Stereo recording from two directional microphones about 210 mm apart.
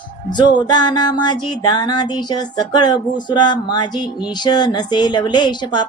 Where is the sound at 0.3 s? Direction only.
20° left (ahead or behind).